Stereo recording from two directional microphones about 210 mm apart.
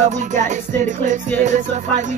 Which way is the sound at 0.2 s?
35° right (ahead or behind).